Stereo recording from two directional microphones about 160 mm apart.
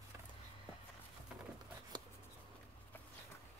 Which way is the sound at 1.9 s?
25° right (ahead or behind).